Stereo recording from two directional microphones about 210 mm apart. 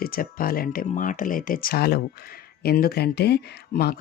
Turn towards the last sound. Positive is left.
turn(degrees=50)  # may be behind; listen again after turning